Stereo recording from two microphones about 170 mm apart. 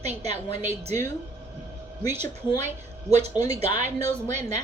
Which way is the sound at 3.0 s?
40° right (ahead or behind).